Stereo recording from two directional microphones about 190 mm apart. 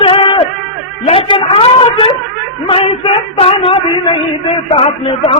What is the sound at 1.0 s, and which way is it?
A man's voice, 30° left (ahead or behind).